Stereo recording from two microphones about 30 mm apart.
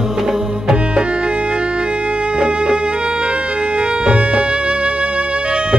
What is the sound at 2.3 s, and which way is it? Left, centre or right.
Music, right.